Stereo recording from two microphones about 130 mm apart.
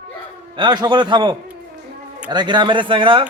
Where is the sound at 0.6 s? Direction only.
35° right (ahead or behind).